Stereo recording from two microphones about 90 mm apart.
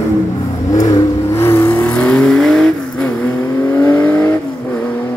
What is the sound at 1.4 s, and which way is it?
Vehicle, 25° left (ahead or behind).